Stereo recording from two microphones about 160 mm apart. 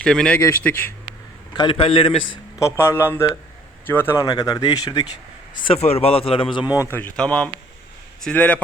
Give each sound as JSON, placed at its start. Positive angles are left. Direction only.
{"t": 0.0, "sound": "a man's voice", "side_deg": 5}
{"t": 1.5, "sound": "speech", "side_deg": 30}
{"t": 2.6, "sound": "speech", "side_deg": 15}
{"t": 4.2, "sound": "speech", "side_deg": 25}
{"t": 5.5, "sound": "speech", "side_deg": 35}
{"t": 6.9, "sound": "speech", "side_deg": 10}